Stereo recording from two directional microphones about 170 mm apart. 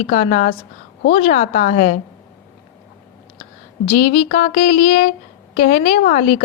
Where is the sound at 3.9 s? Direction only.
45° left (ahead or behind).